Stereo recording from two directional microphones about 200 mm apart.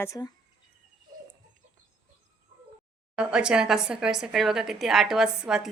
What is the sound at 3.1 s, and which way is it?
A woman's voice, 5° right (ahead or behind).